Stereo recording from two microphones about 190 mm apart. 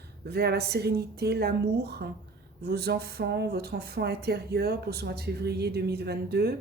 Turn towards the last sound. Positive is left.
turn(degrees=-55)  # may be behind; listen again after turning